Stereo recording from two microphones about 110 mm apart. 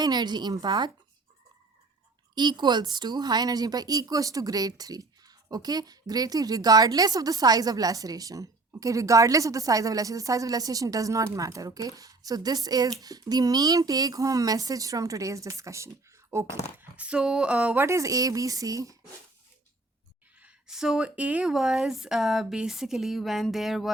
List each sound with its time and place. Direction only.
0.0 s a woman's voice: 40° right (ahead or behind)
2.3 s a woman's voice: 40° right (ahead or behind); by 16.9 s 20° right (ahead or behind)
17.0 s a sound: 10° right (ahead or behind)
17.8 s a woman's voice: 30° right (ahead or behind)
20.4 s speech: 5° right (ahead or behind)